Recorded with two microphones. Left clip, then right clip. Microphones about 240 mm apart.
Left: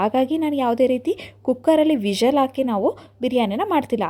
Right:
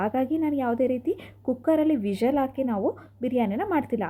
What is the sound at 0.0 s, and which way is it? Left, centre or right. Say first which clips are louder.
A woman's voice: left 6 dB; left.